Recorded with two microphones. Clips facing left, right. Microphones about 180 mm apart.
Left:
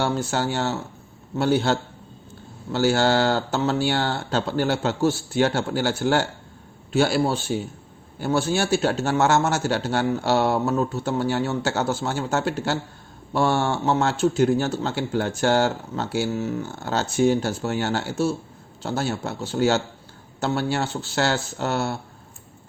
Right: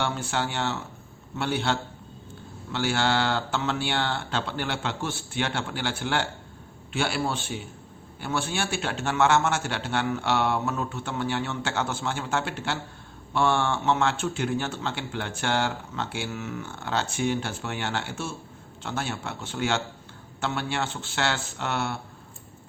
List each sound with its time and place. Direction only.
0.0 s a man's voice: 40° left (ahead or behind)